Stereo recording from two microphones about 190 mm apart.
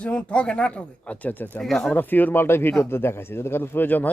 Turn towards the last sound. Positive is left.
turn(degrees=10)  # may be behind; listen again after turning